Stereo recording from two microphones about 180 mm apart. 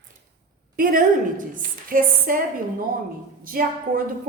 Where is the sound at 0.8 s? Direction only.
50° right (ahead or behind).